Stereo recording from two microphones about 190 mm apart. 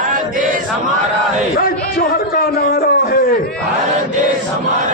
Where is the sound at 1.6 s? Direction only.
50° left (ahead or behind).